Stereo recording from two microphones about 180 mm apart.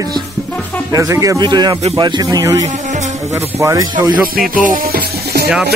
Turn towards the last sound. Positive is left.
turn(degrees=-60)  # may be behind; listen again after turning